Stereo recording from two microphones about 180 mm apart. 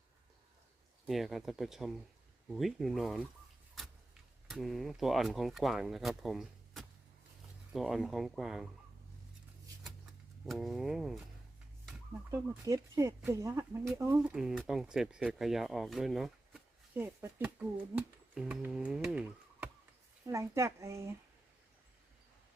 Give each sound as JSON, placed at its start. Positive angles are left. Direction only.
{"t": 1.0, "sound": "speech", "side_deg": 0}
{"t": 4.4, "sound": "speech", "side_deg": 0}
{"t": 10.4, "sound": "speech", "side_deg": 0}
{"t": 12.3, "sound": "speech", "side_deg": -20}
{"t": 14.2, "sound": "speech", "side_deg": -5}
{"t": 17.0, "sound": "speech", "side_deg": -10}